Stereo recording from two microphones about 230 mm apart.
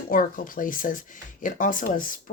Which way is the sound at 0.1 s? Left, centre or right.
Left.